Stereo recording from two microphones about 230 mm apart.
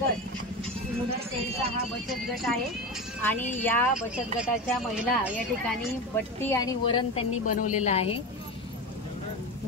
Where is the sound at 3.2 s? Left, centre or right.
Centre.